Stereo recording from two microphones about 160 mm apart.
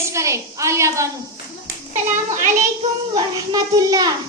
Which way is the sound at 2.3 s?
50° right (ahead or behind).